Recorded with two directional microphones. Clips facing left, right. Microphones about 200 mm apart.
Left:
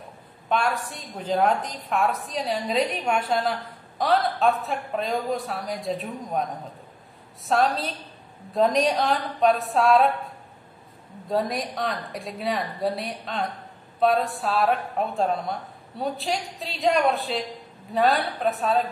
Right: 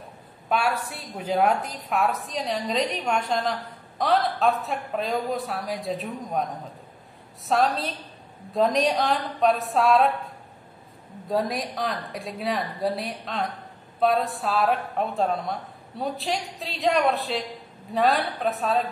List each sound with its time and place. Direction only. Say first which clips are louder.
0.5 s speech: even; 5° right (ahead or behind)
7.4 s speech: even; centre (ahead or behind)